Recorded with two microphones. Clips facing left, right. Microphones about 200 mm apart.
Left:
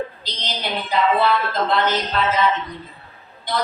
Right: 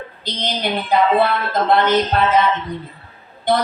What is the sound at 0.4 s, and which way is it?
Speech, 55° right (ahead or behind).